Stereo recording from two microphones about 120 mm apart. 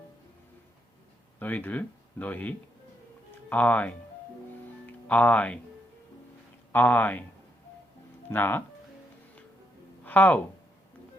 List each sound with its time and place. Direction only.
1.4 s speech: 15° left (ahead or behind)
6.7 s speech: 15° left (ahead or behind)
8.3 s speech: 15° left (ahead or behind)
10.0 s speech: 15° left (ahead or behind)